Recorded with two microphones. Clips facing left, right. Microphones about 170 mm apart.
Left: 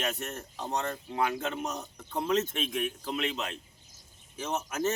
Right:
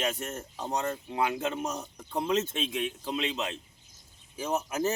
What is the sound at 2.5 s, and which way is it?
Speech, 20° right (ahead or behind).